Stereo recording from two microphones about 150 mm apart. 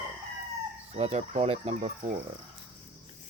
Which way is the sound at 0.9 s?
45° right (ahead or behind).